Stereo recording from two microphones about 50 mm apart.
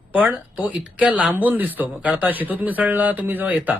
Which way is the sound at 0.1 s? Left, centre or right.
Right.